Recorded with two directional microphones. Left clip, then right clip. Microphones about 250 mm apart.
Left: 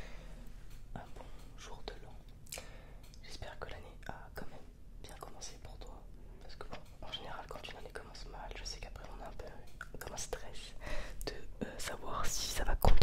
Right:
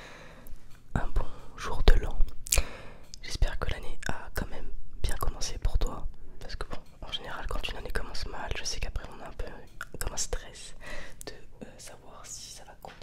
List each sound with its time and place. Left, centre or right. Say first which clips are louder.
0.0 s a sound: right 7 dB; right
0.9 s whispering: right 14 dB; right
6.4 s whispering: right 9 dB; right
7.0 s whispering: right 8 dB; right
10.3 s whispering: right 5 dB; centre
10.8 s whispering: right 2 dB; centre
11.6 s whispering: left 5 dB; left
12.1 s whispering: left 7 dB; left